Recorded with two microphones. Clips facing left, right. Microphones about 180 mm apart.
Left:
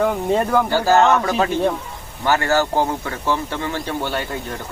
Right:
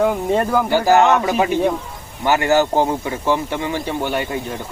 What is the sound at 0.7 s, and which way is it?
Speech, 15° right (ahead or behind).